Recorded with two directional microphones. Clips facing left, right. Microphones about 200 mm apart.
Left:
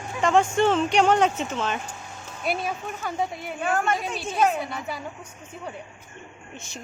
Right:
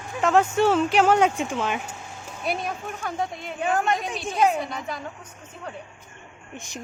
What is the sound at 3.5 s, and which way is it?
Speech, 20° right (ahead or behind).